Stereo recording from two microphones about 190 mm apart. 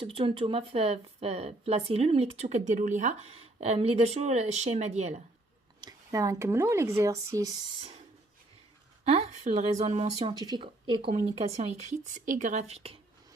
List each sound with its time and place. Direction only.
0.0 s speech: 30° right (ahead or behind)
5.8 s speech: 15° right (ahead or behind)
9.0 s speech: 35° right (ahead or behind)
10.3 s speech: 20° right (ahead or behind)